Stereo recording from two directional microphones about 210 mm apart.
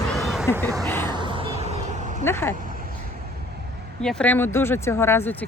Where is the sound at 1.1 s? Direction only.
20° right (ahead or behind).